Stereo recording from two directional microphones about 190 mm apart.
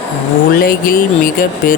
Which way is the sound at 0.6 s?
50° left (ahead or behind).